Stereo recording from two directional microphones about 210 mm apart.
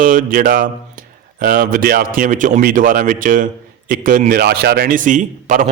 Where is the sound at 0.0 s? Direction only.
40° right (ahead or behind).